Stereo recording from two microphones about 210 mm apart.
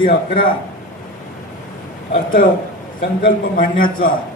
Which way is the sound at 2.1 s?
40° left (ahead or behind).